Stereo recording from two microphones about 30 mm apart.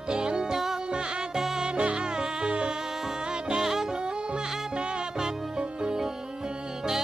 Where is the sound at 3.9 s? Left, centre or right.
Right.